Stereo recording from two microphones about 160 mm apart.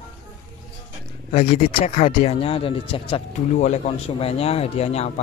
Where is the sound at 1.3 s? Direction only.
40° left (ahead or behind).